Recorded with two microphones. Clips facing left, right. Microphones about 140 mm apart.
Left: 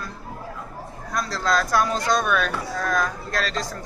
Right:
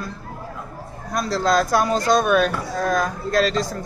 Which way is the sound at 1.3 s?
25° right (ahead or behind).